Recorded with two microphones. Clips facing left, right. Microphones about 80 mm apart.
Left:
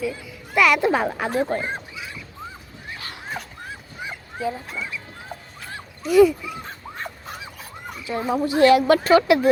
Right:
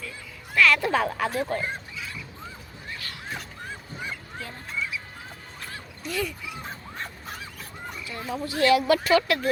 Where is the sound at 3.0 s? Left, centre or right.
Left.